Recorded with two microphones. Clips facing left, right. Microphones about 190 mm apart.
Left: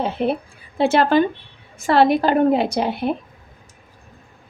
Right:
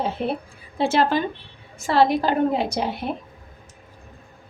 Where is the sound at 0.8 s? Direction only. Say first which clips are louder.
Left 5 dB; 60° left (ahead or behind).